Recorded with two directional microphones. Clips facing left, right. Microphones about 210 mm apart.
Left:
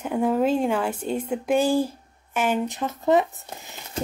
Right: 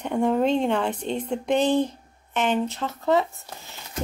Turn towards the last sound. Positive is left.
turn(degrees=15)  # may be behind; listen again after turning